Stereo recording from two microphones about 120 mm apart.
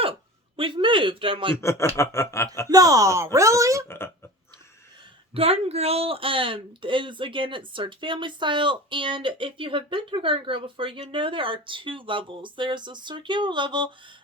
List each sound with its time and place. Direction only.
0.5 s speech: 45° right (ahead or behind)
1.6 s a sound: 25° left (ahead or behind)
2.6 s speech: 30° right (ahead or behind)
3.8 s speech: 20° left (ahead or behind)
5.3 s speech: 55° right (ahead or behind); by 13.9 s 40° right (ahead or behind)